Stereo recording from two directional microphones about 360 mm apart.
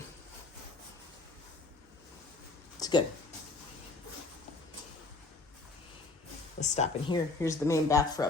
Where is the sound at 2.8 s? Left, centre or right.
Centre.